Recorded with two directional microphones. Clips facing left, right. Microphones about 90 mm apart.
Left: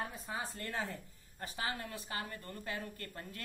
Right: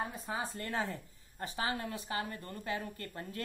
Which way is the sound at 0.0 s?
15° right (ahead or behind).